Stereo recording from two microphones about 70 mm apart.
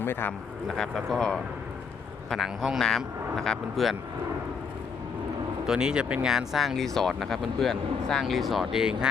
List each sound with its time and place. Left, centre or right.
0.0 s speech: left
0.8 s speech: centre
5.6 s speech: centre